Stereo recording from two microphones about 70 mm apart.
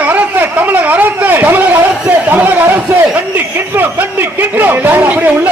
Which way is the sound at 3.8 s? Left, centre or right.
Right.